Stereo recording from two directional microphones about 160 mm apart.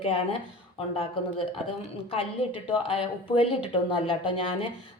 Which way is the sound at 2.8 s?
35° left (ahead or behind).